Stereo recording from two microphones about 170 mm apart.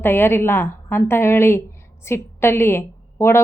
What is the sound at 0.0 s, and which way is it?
A woman's voice, 15° left (ahead or behind).